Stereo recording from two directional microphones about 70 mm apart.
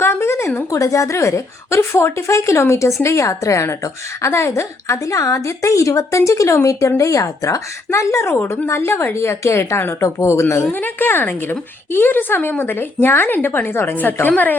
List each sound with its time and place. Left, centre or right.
0.0 s a woman's voice: left
10.7 s a woman's voice: left